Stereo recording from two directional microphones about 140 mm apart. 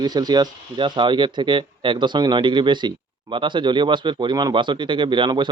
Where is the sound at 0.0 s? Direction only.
30° right (ahead or behind).